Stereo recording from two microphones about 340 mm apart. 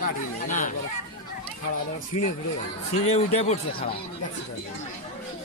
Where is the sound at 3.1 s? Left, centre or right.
Centre.